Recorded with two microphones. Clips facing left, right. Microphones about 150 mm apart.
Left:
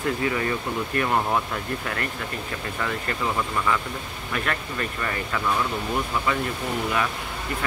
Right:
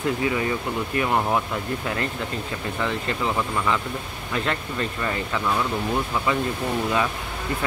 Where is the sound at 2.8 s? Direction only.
15° right (ahead or behind).